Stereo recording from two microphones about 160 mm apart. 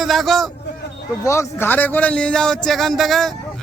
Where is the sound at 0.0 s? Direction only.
Centre (ahead or behind).